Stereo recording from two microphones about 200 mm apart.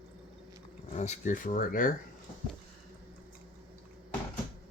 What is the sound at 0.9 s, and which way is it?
Speech, 35° left (ahead or behind).